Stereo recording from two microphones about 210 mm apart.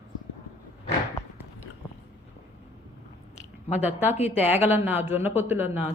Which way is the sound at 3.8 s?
10° right (ahead or behind).